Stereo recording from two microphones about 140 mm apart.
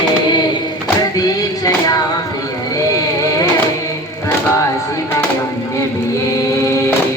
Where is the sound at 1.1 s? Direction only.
25° left (ahead or behind).